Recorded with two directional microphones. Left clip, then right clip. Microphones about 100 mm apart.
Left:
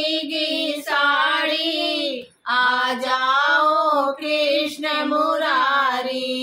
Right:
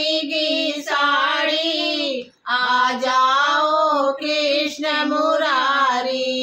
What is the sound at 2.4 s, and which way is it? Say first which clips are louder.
Child singing: even; 45° left (ahead or behind).